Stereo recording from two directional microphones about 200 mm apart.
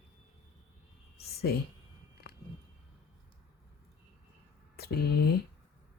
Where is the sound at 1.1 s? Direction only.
50° left (ahead or behind).